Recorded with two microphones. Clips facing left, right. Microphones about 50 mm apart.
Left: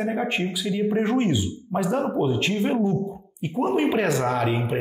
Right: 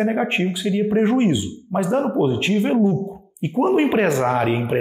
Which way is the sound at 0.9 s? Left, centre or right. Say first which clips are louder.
Right 5 dB; right.